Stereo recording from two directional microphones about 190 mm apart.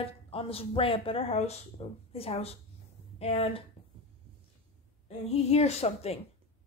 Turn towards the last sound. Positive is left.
turn(degrees=35)  # may be behind; listen again after turning